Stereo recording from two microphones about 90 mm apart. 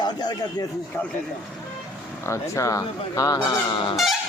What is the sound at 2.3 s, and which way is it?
Speech, 35° left (ahead or behind).